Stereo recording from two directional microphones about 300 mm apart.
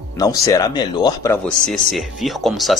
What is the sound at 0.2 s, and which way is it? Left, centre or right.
Speech, centre.